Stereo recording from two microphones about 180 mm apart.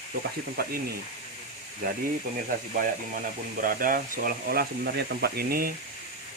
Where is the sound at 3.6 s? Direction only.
50° right (ahead or behind).